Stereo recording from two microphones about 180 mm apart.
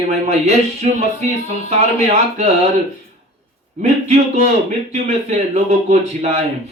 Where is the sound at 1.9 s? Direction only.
40° right (ahead or behind).